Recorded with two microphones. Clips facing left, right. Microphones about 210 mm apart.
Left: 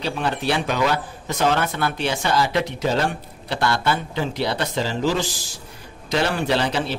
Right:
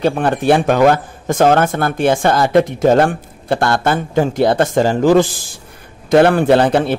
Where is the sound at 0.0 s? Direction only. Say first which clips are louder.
Right 9 dB; 50° right (ahead or behind).